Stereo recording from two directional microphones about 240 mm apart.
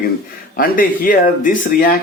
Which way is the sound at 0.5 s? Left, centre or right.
Left.